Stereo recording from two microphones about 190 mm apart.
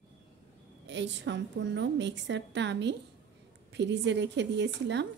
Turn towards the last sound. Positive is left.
turn(degrees=-65)  # may be behind; listen again after turning